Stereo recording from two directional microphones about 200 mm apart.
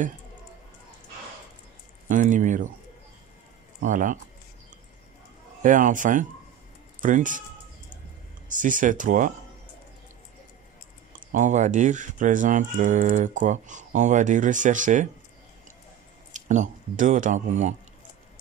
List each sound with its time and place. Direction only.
2.0 s speech: 40° right (ahead or behind)
3.8 s speech: 40° right (ahead or behind)
5.6 s speech: 40° right (ahead or behind)
8.5 s speech: 40° right (ahead or behind)
11.1 s speech: 40° right (ahead or behind)
16.3 s speech: 35° right (ahead or behind)